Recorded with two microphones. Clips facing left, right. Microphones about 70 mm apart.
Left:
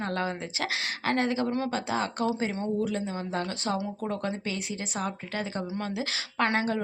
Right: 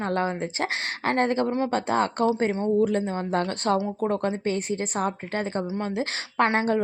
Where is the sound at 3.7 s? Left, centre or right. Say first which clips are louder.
Right 6 dB; right.